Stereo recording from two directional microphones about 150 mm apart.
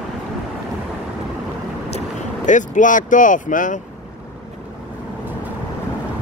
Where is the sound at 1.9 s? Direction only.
55° left (ahead or behind).